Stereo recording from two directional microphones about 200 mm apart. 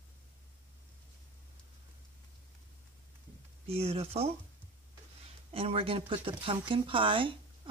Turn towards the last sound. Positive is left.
turn(degrees=-25)  # may be behind; listen again after turning